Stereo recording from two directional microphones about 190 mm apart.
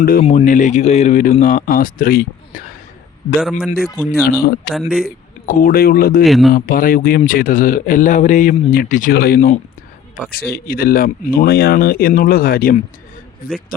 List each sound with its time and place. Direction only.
0.0 s speech: 50° left (ahead or behind)
3.8 s speech: 15° left (ahead or behind)
4.2 s speech: 55° left (ahead or behind)
4.7 s speech: centre (ahead or behind)
5.5 s speech: 45° left (ahead or behind)
6.2 s speech: centre (ahead or behind)
6.5 s speech: 50° left (ahead or behind)